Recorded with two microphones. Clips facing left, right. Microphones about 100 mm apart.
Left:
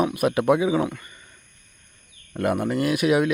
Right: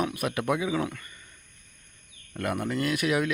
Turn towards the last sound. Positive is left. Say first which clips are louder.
# left 6 dB
turn(degrees=20)  # may be behind; listen again after turning